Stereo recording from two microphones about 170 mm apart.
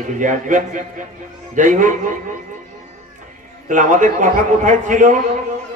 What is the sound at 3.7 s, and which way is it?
A man's voice, 50° right (ahead or behind).